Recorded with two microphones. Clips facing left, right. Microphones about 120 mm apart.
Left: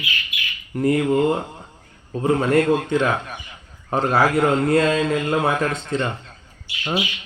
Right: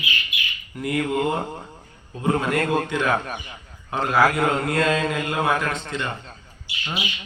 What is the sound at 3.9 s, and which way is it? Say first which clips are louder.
A man's voice: left 1 dB; 35° left (ahead or behind).